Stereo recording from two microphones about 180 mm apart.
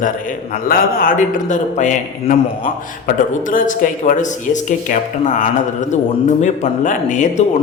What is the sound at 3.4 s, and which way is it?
Speech, 50° left (ahead or behind).